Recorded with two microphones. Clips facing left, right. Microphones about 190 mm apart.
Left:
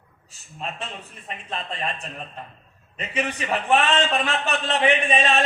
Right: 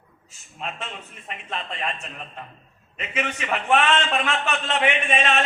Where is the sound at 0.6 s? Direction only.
35° left (ahead or behind).